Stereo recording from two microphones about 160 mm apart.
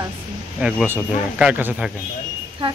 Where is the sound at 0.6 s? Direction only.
5° right (ahead or behind).